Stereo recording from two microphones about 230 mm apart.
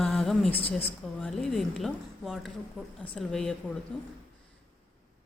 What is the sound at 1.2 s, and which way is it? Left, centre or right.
A woman's voice, centre.